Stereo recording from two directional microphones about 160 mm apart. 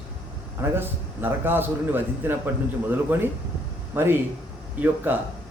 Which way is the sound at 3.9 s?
15° right (ahead or behind).